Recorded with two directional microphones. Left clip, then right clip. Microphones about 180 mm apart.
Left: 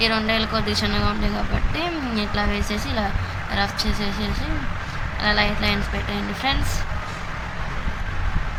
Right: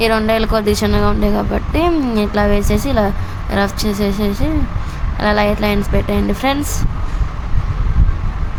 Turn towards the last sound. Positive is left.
turn(degrees=-55)  # may be behind; listen again after turning